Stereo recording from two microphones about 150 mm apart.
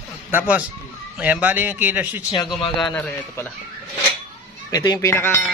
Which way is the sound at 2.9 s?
10° left (ahead or behind).